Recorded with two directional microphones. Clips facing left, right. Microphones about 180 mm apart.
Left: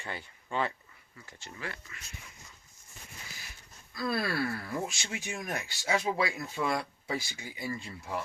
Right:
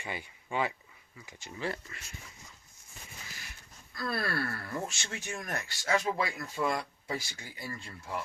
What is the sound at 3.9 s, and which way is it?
Speech, 10° left (ahead or behind).